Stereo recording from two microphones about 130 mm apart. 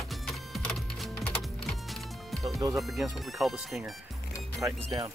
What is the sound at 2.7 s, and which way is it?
Speech, centre (ahead or behind).